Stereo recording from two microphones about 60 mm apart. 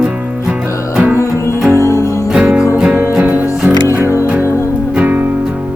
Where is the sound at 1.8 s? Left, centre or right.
Left.